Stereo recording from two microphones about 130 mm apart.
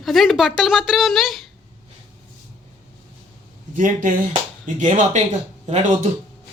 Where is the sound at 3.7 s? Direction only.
85° right.